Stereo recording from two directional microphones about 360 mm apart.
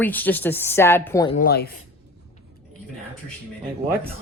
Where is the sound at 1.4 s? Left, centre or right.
Left.